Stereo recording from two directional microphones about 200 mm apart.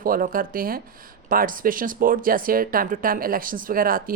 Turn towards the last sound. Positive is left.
turn(degrees=-45)  # may be behind; listen again after turning